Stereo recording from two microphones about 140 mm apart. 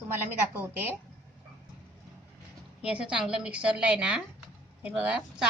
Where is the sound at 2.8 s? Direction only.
10° right (ahead or behind).